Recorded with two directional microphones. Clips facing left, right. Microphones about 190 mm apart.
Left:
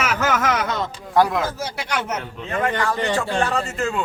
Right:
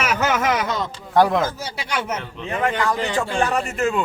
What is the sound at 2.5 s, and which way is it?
A man's voice, 15° right (ahead or behind).